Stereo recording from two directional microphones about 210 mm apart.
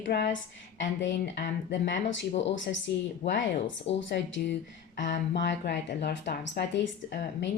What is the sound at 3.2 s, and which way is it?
Speech, 30° left (ahead or behind).